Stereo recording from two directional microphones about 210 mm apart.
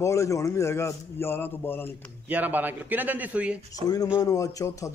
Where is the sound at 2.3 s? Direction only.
10° right (ahead or behind).